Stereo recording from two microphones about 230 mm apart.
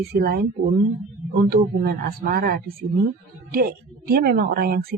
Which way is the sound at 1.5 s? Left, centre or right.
Right.